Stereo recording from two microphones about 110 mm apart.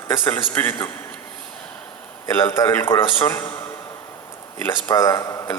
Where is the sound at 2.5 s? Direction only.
20° left (ahead or behind).